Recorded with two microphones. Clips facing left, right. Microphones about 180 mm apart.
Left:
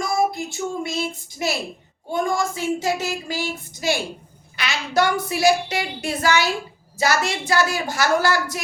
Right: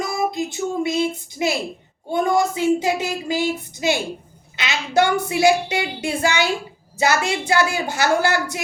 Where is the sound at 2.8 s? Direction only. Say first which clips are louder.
Right 2 dB; 20° right (ahead or behind).